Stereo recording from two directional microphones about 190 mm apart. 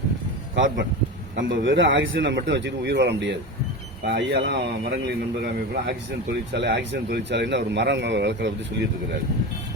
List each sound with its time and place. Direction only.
0.5 s a man's voice: 75° right (ahead or behind)
6.5 s speech: 65° right (ahead or behind)